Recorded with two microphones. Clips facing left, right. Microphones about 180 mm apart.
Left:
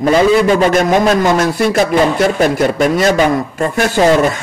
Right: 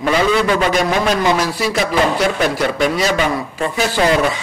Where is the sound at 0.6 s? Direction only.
50° left (ahead or behind).